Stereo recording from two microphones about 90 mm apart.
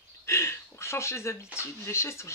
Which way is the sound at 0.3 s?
30° left (ahead or behind).